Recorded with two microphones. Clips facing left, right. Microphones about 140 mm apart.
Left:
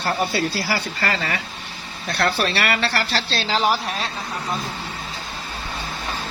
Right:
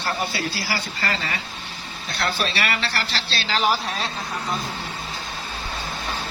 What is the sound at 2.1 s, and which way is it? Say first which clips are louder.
A woman's voice: left 4 dB; 60° left (ahead or behind).